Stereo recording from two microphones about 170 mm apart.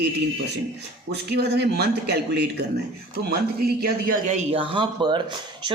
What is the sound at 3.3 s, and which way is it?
Speech, 60° right (ahead or behind).